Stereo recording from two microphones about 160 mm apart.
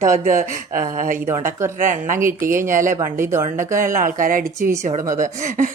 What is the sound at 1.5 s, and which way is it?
Speech, 15° right (ahead or behind).